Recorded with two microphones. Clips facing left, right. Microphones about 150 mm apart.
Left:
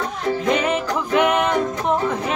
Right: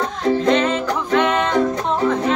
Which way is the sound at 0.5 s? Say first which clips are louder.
Right 3 dB; 10° left (ahead or behind).